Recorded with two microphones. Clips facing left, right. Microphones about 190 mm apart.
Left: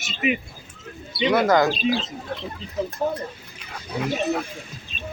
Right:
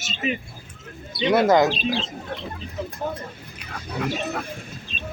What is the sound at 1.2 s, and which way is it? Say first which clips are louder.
Speech: right 1 dB; 25° right (ahead or behind).